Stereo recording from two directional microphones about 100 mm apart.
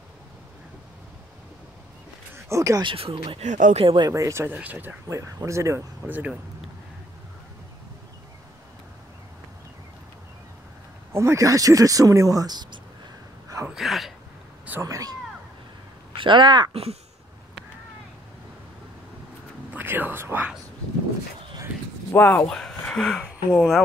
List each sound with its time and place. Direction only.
2.3 s a sound: 30° right (ahead or behind)
2.8 s speech: 65° right (ahead or behind)
4.1 s speech: 30° right (ahead or behind)
4.6 s speech: 15° right (ahead or behind)
5.1 s speech: 30° right (ahead or behind)
6.0 s speech: 15° right (ahead or behind)
11.1 s speech: 30° right (ahead or behind)
13.7 s a sound: centre (ahead or behind)
14.8 s speech: 35° right (ahead or behind)
16.2 s speech: 50° right (ahead or behind)
19.7 s speech: 20° right (ahead or behind)
22.1 s speech: 20° left (ahead or behind)
22.5 s speech: 5° left (ahead or behind)